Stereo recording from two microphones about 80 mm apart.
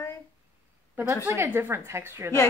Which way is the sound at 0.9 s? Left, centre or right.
Right.